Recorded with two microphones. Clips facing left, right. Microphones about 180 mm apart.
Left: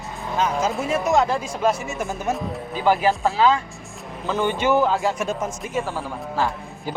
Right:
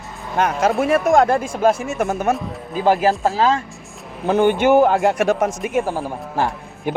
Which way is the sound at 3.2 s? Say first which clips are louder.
Right 1 dB; 40° right (ahead or behind).